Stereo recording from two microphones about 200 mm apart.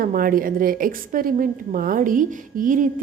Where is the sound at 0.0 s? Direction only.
45° right (ahead or behind).